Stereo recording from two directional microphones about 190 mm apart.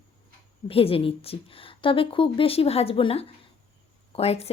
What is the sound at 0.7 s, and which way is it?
Speech, 30° left (ahead or behind).